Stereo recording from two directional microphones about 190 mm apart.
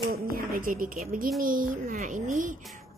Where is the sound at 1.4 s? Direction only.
50° right (ahead or behind).